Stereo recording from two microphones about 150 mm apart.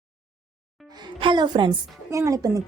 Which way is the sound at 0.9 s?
30° right (ahead or behind).